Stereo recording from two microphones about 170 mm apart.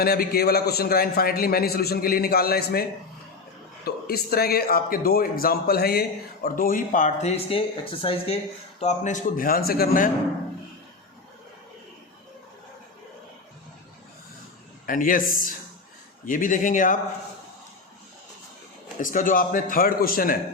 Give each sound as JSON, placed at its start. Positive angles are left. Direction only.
{"t": 0.0, "sound": "speech", "side_deg": 65}
{"t": 3.8, "sound": "speech", "side_deg": 65}
{"t": 8.8, "sound": "speech", "side_deg": 45}
{"t": 14.8, "sound": "speech", "side_deg": 55}
{"t": 18.9, "sound": "speech", "side_deg": 50}